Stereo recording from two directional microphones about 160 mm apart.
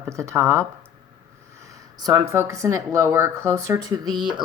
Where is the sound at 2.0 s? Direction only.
25° right (ahead or behind).